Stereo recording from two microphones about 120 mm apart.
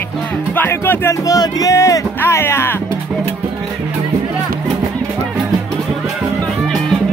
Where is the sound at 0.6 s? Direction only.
20° left (ahead or behind).